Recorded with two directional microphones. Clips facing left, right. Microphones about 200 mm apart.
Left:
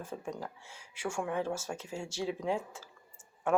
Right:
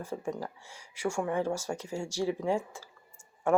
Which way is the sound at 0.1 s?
10° right (ahead or behind).